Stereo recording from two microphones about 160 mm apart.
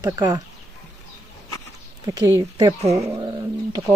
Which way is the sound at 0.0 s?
20° right (ahead or behind).